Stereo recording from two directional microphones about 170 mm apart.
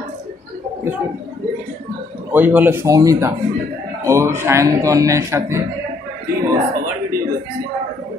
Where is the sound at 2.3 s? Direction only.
10° right (ahead or behind).